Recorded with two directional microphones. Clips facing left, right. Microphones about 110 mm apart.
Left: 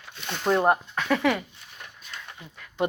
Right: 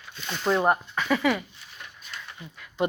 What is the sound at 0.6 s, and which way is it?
Speech, centre (ahead or behind).